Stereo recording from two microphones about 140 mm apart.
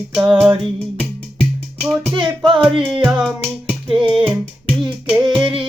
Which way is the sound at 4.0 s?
35° right (ahead or behind).